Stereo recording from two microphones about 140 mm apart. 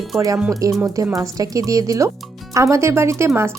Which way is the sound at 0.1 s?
20° right (ahead or behind).